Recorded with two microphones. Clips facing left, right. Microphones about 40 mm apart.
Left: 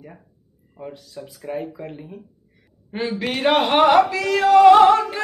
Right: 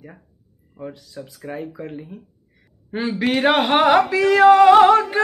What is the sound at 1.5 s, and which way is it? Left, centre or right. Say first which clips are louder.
Carnatic music: left 3 dB; centre.